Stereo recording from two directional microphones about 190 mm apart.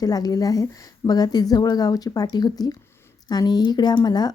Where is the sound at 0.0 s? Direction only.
20° left (ahead or behind).